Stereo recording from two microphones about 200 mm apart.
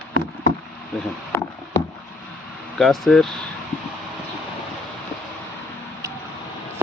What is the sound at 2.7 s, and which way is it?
Speech, centre (ahead or behind).